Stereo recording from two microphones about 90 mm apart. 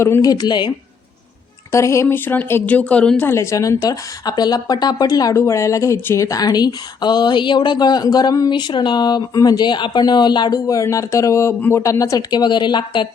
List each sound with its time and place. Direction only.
0.2 s speech: 45° left (ahead or behind)
1.7 s a woman's voice: 35° left (ahead or behind); by 3.2 s 15° left (ahead or behind)
3.2 s speech: 30° left (ahead or behind)
5.3 s speech: 35° left (ahead or behind); by 13.1 s 60° left (ahead or behind)